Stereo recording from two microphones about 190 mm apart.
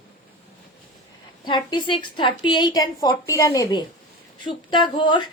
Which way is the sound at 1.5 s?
25° left (ahead or behind).